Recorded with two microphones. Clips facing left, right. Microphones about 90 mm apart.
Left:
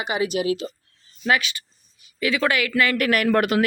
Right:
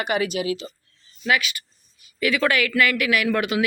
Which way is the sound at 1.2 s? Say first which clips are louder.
Left 1 dB; 30° left (ahead or behind).